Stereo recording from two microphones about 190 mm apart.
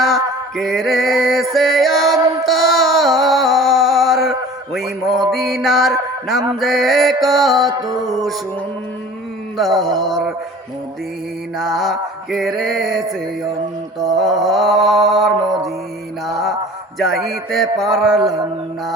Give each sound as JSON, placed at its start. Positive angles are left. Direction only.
{"t": 0.5, "sound": "mantra", "side_deg": 0}
{"t": 1.5, "sound": "music", "side_deg": 0}
{"t": 3.2, "sound": "a sound", "side_deg": 0}
{"t": 6.2, "sound": "mantra", "side_deg": 0}
{"t": 7.7, "sound": "mantra", "side_deg": -20}
{"t": 9.6, "sound": "mantra", "side_deg": 0}
{"t": 11.5, "sound": "mantra", "side_deg": 0}
{"t": 14.1, "sound": "mantra", "side_deg": 0}
{"t": 17.0, "sound": "mantra", "side_deg": 0}